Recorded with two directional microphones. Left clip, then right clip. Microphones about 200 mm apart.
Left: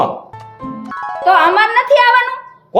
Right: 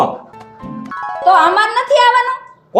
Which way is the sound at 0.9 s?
Centre (ahead or behind).